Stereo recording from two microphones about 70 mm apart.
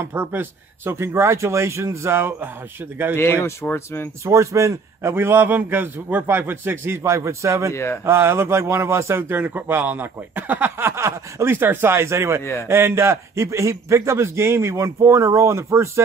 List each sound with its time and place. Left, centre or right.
0.0 s speech: right
3.7 s speech: left
4.2 s a man's voice: right
5.1 s a man's voice: right
7.7 s speech: left
8.0 s speech: right
9.4 s speech: right
11.5 s a man's voice: right